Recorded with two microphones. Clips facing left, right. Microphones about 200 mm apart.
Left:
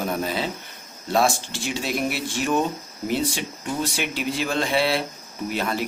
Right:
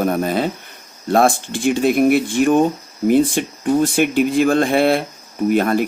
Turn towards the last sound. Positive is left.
turn(degrees=-50)  # may be behind; listen again after turning